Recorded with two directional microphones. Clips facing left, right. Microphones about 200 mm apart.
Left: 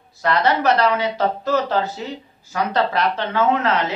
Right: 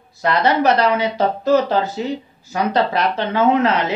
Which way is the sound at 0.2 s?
15° right (ahead or behind).